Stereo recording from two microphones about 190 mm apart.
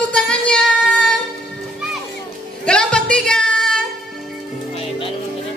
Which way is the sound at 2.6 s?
5° left (ahead or behind).